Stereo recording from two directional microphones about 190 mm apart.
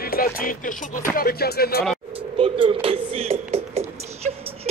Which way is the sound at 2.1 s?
30° right (ahead or behind).